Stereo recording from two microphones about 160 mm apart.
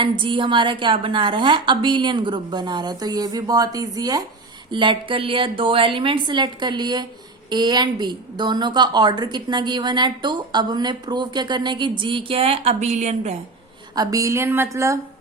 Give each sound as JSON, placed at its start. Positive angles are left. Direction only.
{"t": 0.0, "sound": "a woman's voice", "side_deg": -30}
{"t": 13.9, "sound": "a woman's voice", "side_deg": -20}